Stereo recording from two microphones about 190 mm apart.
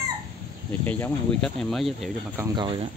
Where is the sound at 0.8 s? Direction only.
10° left (ahead or behind).